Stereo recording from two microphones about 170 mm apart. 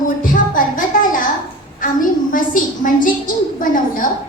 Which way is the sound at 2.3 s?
50° left (ahead or behind).